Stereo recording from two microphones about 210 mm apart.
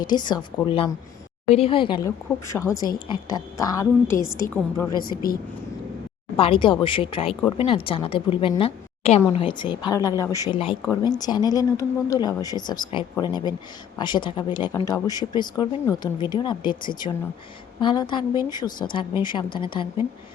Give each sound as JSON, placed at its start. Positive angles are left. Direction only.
{"t": 0.0, "sound": "a woman's voice", "side_deg": 20}
{"t": 4.9, "sound": "speech", "side_deg": 45}
{"t": 6.3, "sound": "a woman's voice", "side_deg": 25}